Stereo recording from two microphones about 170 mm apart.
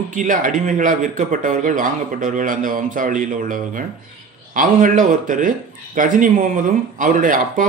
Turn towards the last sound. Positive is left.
turn(degrees=-50)  # may be behind; listen again after turning